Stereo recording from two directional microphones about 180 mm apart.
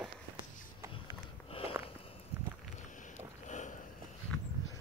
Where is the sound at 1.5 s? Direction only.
30° left (ahead or behind).